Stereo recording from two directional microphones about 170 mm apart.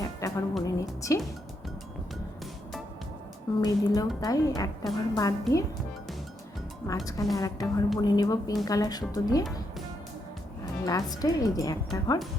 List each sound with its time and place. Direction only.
0.0 s music: 20° left (ahead or behind)
0.6 s a woman's voice: 20° left (ahead or behind)
3.6 s speech: 20° left (ahead or behind)
6.8 s speech: 20° left (ahead or behind)
10.8 s speech: 20° left (ahead or behind)